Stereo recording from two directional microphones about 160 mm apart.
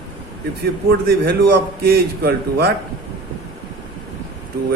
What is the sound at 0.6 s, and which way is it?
A man's voice, 80° right.